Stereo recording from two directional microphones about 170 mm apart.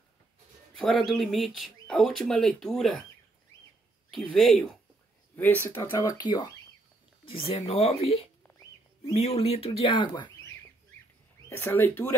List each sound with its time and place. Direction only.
0.7 s speech: centre (ahead or behind)
4.1 s speech: centre (ahead or behind)
5.3 s speech: 10° left (ahead or behind)
5.8 s speech: 20° left (ahead or behind)
11.4 s speech: 15° left (ahead or behind)